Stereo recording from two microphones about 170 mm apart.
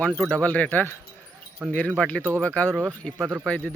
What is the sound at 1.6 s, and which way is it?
Speech, centre (ahead or behind).